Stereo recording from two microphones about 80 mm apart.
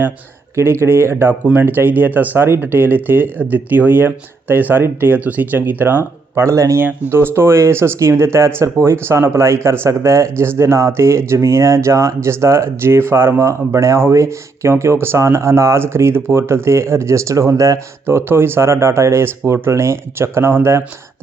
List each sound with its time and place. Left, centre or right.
0.5 s speech: right
18.0 s speech: right